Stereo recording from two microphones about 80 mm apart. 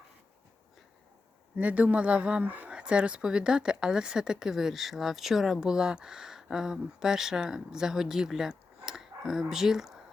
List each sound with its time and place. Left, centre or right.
1.5 s speech: centre